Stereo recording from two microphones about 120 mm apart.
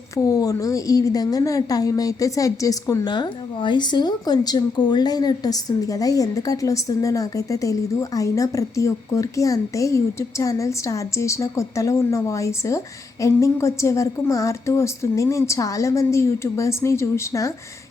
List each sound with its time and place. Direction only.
0.2 s a woman's voice: 30° left (ahead or behind)
3.1 s a woman's voice: 40° left (ahead or behind); by 17.5 s 25° left (ahead or behind)